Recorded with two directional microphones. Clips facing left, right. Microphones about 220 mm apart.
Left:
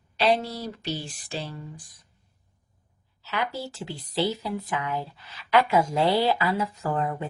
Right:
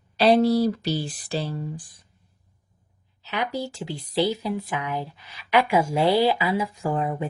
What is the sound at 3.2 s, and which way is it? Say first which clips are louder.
Speech: right 3 dB; 15° right (ahead or behind).